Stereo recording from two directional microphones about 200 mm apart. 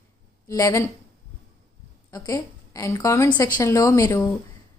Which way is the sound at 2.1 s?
15° left (ahead or behind).